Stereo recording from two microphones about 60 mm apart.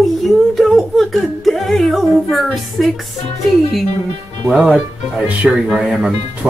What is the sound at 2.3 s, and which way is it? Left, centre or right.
Speech, centre.